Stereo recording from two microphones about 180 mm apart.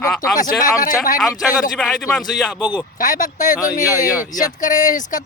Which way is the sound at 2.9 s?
45° left (ahead or behind).